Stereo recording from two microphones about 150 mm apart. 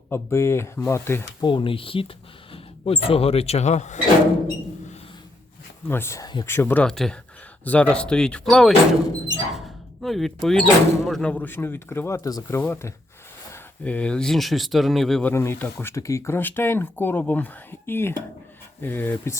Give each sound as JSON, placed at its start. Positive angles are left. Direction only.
{"t": 0.1, "sound": "speech", "side_deg": 20}
{"t": 1.4, "sound": "speech", "side_deg": 35}
{"t": 5.9, "sound": "speech", "side_deg": 15}
{"t": 6.5, "sound": "speech", "side_deg": 15}
{"t": 15.3, "sound": "speech", "side_deg": 15}